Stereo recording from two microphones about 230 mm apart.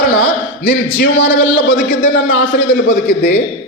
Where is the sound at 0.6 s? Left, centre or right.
Left.